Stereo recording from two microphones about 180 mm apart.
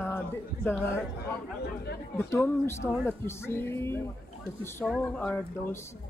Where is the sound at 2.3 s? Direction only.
15° left (ahead or behind).